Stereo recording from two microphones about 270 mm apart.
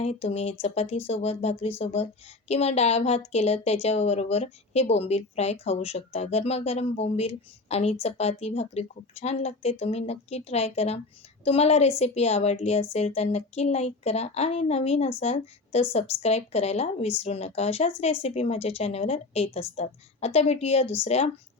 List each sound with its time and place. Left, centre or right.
0.0 s speech: left